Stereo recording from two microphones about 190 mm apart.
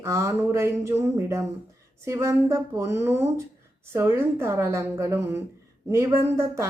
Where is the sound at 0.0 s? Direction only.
15° right (ahead or behind).